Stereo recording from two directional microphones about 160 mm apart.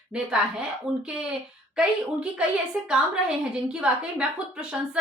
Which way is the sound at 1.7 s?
5° right (ahead or behind).